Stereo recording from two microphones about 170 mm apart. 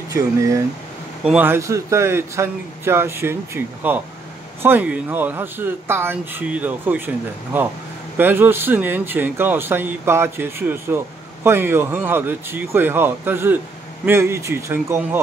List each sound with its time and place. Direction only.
0.1 s speech: 20° right (ahead or behind)